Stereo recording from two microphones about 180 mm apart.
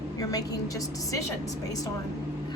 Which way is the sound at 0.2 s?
20° left (ahead or behind).